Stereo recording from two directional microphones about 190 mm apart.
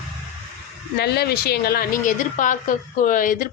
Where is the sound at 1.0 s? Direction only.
55° left (ahead or behind).